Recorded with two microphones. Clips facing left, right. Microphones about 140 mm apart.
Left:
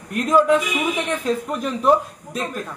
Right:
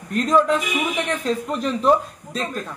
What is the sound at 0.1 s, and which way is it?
Speech, 10° left (ahead or behind).